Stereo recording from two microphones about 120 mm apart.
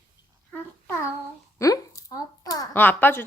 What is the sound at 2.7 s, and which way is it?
Speech, 15° left (ahead or behind).